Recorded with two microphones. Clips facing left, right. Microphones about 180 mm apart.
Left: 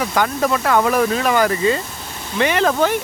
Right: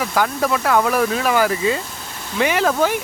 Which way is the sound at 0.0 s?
Centre (ahead or behind).